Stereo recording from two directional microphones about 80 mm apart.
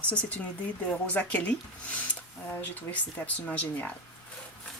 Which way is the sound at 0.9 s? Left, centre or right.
Centre.